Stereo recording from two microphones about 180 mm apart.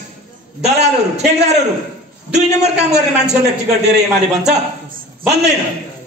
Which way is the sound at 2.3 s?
40° right (ahead or behind).